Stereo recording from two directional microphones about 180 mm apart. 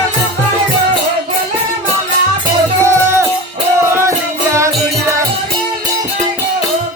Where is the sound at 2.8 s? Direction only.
15° right (ahead or behind).